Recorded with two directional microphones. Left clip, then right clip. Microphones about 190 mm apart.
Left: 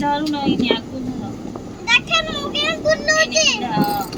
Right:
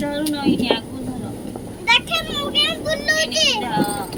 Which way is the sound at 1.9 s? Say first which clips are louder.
Left 1 dB; 10° left (ahead or behind).